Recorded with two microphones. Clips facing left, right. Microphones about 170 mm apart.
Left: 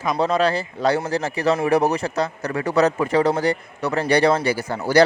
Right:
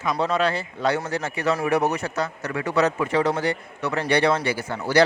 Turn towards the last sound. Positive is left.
turn(degrees=40)  # may be behind; listen again after turning